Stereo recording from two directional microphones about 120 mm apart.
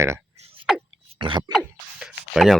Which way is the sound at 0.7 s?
Centre (ahead or behind).